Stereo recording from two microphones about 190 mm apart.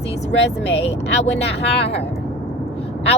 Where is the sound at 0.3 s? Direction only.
65° left (ahead or behind).